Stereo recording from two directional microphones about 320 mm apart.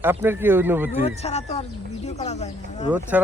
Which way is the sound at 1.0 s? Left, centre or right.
Centre.